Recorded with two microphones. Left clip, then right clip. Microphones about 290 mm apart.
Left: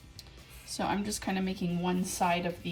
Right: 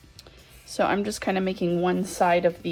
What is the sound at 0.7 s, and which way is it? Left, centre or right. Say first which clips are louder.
Speech: right 9 dB; right.